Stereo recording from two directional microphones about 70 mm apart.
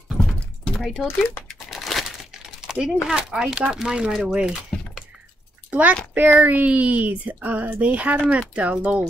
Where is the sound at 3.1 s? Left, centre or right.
Centre.